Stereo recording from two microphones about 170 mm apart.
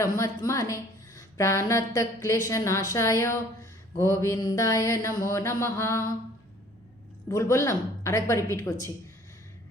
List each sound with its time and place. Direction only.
0.0 s a woman's voice: 20° left (ahead or behind)
7.3 s a woman's voice: 15° left (ahead or behind)